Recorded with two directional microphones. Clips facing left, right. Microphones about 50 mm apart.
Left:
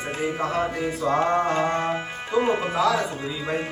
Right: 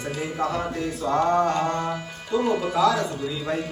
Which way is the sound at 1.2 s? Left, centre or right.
Left.